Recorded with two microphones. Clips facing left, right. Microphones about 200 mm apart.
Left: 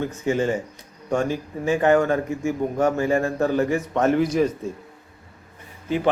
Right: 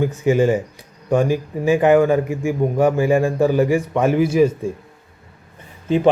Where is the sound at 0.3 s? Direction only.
15° right (ahead or behind).